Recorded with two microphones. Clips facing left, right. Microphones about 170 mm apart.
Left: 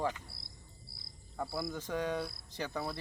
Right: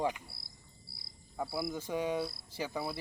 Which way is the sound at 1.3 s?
5° right (ahead or behind).